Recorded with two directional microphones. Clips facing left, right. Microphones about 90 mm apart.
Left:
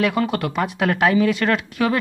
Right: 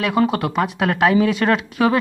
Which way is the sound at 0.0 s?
10° right (ahead or behind).